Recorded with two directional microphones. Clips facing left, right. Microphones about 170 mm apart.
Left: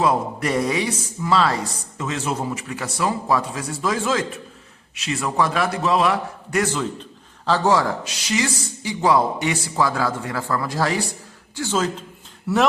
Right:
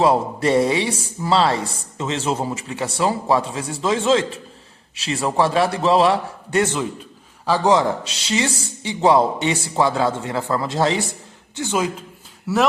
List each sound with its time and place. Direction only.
0.0 s a woman's voice: 30° right (ahead or behind)
12.5 s a man's voice: 5° right (ahead or behind)